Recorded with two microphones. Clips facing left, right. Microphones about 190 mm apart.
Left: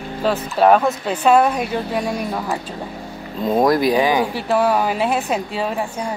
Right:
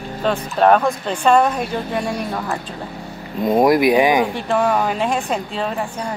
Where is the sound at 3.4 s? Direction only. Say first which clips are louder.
Right 2 dB; 15° right (ahead or behind).